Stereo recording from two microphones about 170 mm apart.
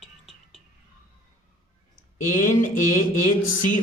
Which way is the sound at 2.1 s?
50° left (ahead or behind).